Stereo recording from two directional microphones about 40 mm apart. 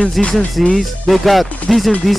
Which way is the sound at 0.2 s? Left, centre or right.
Centre.